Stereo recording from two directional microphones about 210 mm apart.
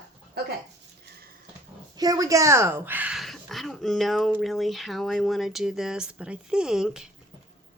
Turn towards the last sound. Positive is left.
turn(degrees=-5)  # may be behind; listen again after turning